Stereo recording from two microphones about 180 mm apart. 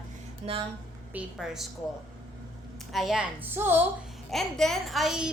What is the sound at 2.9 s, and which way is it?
Speech, centre (ahead or behind).